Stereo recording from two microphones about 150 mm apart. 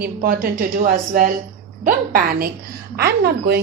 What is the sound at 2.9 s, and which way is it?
Speech, 90° right.